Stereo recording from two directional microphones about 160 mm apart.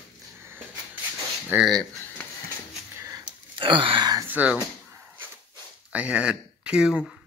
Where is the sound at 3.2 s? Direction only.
30° right (ahead or behind).